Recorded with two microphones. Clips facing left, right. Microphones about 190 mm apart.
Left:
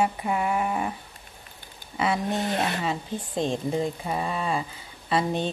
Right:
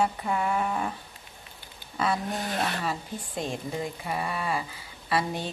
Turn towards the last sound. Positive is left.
turn(degrees=25)  # may be behind; listen again after turning